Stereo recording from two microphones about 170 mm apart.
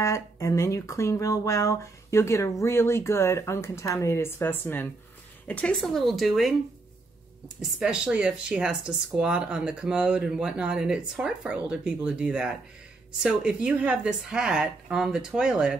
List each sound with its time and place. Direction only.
0.0 s speech: 20° left (ahead or behind); by 6.5 s centre (ahead or behind)
7.6 s speech: 5° right (ahead or behind)